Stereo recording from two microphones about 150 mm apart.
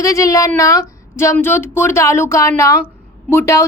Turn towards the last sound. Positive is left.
turn(degrees=20)  # may be behind; listen again after turning